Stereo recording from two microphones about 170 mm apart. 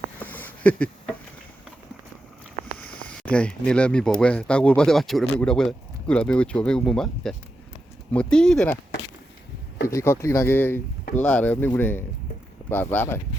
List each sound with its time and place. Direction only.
0.2 s a sound: 10° left (ahead or behind)
2.7 s speech: 5° left (ahead or behind)
9.8 s speech: 15° left (ahead or behind)